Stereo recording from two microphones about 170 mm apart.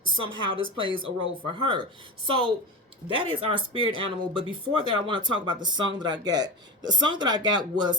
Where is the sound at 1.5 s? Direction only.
30° right (ahead or behind).